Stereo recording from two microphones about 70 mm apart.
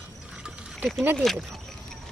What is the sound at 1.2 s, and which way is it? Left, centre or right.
Speech, centre.